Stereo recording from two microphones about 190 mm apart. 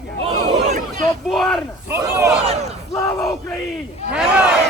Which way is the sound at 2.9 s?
15° left (ahead or behind).